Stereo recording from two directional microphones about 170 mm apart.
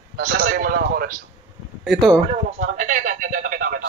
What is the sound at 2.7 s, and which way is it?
Speech, 50° right (ahead or behind).